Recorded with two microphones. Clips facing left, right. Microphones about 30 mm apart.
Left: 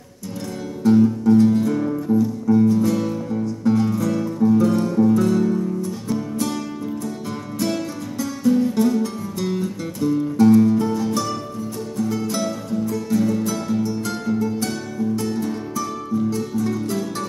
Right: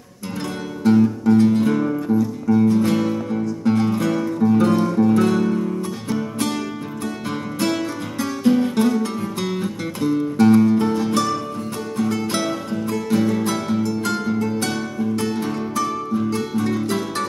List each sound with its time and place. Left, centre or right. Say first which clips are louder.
0.9 s music: even; right
5.1 s music: right 1 dB; right
8.5 s music: even; right